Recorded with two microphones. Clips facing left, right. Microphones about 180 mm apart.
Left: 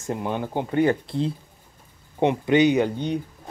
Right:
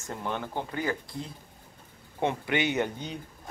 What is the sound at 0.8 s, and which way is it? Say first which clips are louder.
Speech: left 13 dB; 30° left (ahead or behind).